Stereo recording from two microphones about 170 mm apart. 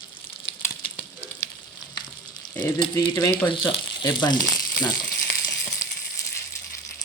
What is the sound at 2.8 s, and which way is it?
Speech, 20° left (ahead or behind).